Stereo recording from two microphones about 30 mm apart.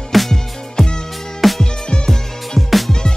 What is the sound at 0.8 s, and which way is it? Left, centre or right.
Music, left.